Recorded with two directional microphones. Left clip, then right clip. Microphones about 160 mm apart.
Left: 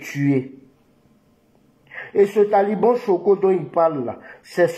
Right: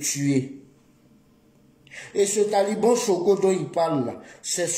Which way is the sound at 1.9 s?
25° right (ahead or behind).